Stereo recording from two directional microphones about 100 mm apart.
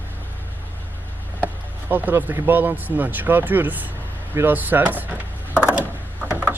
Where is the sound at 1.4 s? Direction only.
20° right (ahead or behind).